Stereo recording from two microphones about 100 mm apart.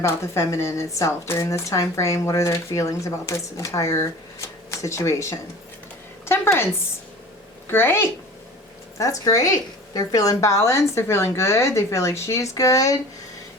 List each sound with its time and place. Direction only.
0.0 s speech: 30° left (ahead or behind)
6.2 s a sound: 25° left (ahead or behind)
7.7 s a woman's voice: 25° left (ahead or behind)
9.0 s speech: 35° left (ahead or behind)